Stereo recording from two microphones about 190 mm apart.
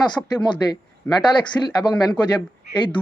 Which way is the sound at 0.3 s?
20° left (ahead or behind).